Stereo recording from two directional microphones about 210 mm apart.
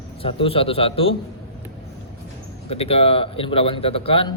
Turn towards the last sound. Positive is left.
turn(degrees=25)  # may be behind; listen again after turning